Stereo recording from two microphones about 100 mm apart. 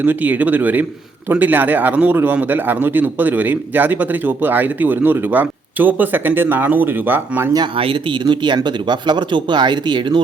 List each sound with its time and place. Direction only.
0.0 s a man's voice: 15° right (ahead or behind)
7.8 s speech: 55° right (ahead or behind)